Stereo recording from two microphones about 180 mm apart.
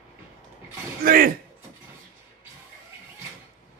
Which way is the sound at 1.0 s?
50° right (ahead or behind).